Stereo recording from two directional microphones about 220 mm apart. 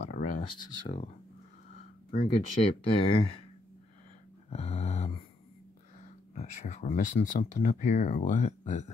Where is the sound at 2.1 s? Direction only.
30° left (ahead or behind).